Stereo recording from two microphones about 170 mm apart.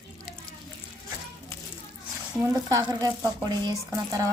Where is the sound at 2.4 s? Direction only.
20° right (ahead or behind).